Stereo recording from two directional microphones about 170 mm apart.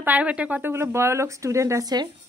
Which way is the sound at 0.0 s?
10° right (ahead or behind).